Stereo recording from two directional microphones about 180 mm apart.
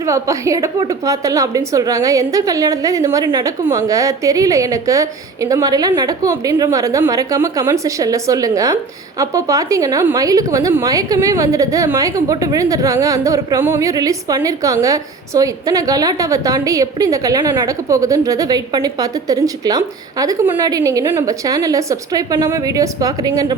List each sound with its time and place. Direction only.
0.0 s a woman's voice: 15° right (ahead or behind)